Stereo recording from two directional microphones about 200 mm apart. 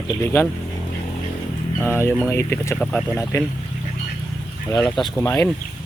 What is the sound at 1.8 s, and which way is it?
Speech, 10° left (ahead or behind).